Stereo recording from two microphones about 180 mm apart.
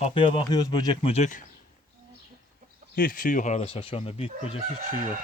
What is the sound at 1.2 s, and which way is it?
Speech, 45° left (ahead or behind).